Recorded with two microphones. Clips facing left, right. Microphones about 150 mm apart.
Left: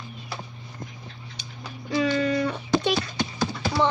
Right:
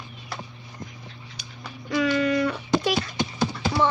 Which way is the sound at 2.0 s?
30° left (ahead or behind).